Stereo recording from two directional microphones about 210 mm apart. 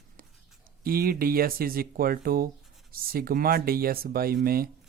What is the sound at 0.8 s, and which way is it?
Speech, 45° right (ahead or behind).